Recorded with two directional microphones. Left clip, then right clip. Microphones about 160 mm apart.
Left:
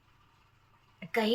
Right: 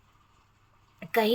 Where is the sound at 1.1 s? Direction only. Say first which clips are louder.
Right 5 dB; 50° right (ahead or behind).